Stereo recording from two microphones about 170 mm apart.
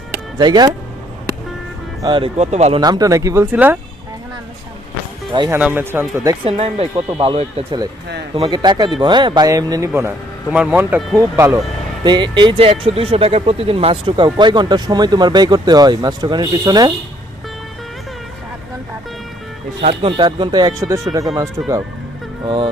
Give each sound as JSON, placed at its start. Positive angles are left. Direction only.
{"t": 0.3, "sound": "speech", "side_deg": -25}
{"t": 2.0, "sound": "speech", "side_deg": -25}
{"t": 2.4, "sound": "speech", "side_deg": -40}
{"t": 2.8, "sound": "speech", "side_deg": -20}
{"t": 5.5, "sound": "speech", "side_deg": -10}
{"t": 6.4, "sound": "speech", "side_deg": -35}
{"t": 10.5, "sound": "speech", "side_deg": -5}
{"t": 11.2, "sound": "speech", "side_deg": -15}
{"t": 19.8, "sound": "speech", "side_deg": -35}
{"t": 22.4, "sound": "speech", "side_deg": -30}